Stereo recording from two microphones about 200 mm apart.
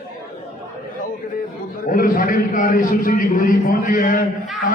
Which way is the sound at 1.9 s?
45° left (ahead or behind).